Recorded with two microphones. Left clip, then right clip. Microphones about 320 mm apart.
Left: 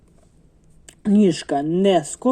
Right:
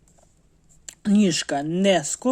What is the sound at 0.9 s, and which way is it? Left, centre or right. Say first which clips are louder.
Speech: left 4 dB; right.